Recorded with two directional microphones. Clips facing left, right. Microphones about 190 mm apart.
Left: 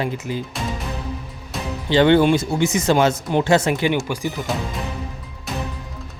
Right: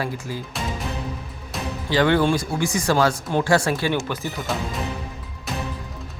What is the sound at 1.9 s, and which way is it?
Speech, 25° left (ahead or behind).